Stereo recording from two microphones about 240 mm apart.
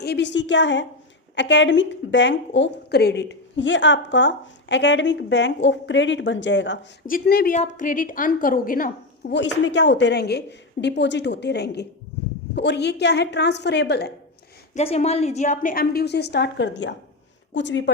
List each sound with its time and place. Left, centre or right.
0.0 s a woman's voice: left
7.0 s a woman's voice: left
14.8 s a woman's voice: left